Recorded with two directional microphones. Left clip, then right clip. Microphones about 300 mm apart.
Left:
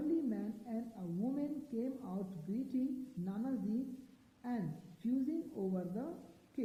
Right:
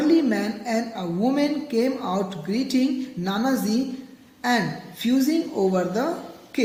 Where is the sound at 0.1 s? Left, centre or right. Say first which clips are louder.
Right 18 dB; centre.